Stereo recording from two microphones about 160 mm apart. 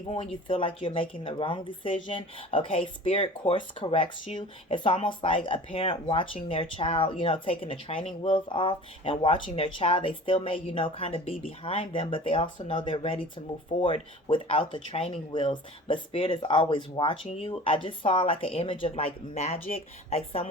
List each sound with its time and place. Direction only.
0.4 s a woman's voice: 35° left (ahead or behind)